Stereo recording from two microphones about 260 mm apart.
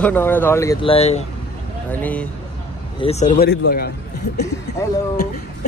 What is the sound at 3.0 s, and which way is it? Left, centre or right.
Speech, left.